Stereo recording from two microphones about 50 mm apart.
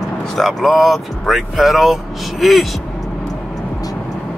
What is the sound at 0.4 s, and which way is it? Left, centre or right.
Speech, centre.